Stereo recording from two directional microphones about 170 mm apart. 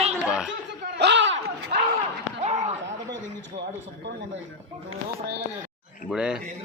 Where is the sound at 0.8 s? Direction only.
90° right.